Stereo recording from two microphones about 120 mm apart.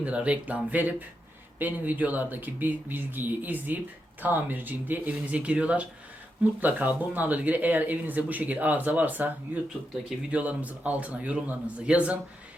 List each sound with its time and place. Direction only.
0.0 s speech: 10° right (ahead or behind)